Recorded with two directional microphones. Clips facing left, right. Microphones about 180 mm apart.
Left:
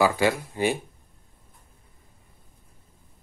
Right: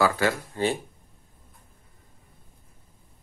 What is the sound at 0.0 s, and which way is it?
Speech, 15° left (ahead or behind).